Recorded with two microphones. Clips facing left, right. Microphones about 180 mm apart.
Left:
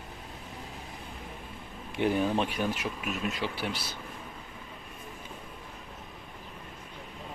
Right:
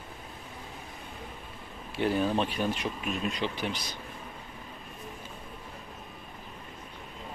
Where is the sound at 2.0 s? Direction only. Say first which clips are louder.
Even; 15° left (ahead or behind).